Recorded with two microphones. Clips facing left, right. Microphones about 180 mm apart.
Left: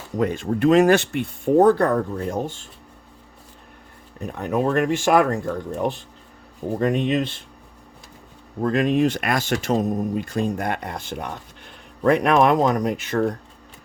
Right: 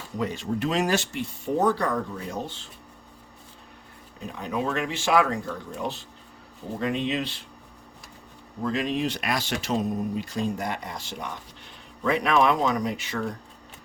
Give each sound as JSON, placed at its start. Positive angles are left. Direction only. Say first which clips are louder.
{"t": 0.2, "sound": "speech", "louder": "left 7 dB", "side_deg": 55}
{"t": 4.3, "sound": "speech", "louder": "left 6 dB", "side_deg": 55}
{"t": 8.6, "sound": "speech", "louder": "left 7 dB", "side_deg": 50}